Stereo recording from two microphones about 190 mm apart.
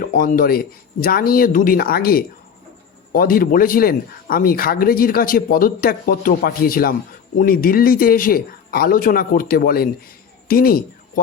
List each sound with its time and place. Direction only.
0.0 s speech: 45° left (ahead or behind)